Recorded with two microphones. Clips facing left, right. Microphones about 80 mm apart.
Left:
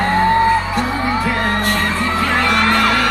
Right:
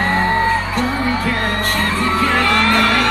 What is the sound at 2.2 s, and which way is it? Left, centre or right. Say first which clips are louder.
Music: even; left.